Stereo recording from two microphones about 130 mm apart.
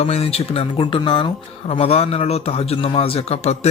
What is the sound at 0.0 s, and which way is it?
Speech, 50° left (ahead or behind).